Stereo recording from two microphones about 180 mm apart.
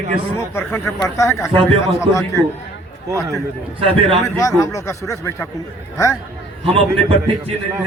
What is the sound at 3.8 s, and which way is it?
Speech, 30° right (ahead or behind).